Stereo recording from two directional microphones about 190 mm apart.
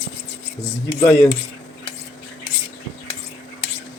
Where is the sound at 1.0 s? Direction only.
10° left (ahead or behind).